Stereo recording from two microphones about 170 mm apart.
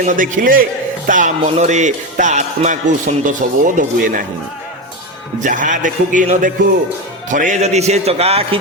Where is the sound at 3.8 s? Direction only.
50° right (ahead or behind).